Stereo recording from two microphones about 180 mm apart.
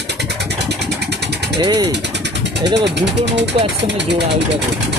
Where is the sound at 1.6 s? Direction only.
25° right (ahead or behind).